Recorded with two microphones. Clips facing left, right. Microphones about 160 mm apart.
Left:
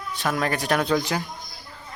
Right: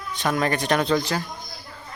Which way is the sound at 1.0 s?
20° left (ahead or behind).